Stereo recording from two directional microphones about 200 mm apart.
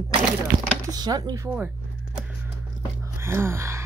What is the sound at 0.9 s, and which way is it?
Speech, 20° right (ahead or behind).